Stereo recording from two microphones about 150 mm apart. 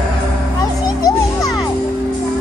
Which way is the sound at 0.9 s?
25° left (ahead or behind).